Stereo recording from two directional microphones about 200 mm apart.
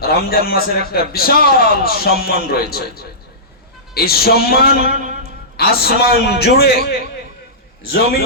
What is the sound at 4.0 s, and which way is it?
A man's voice, 50° left (ahead or behind).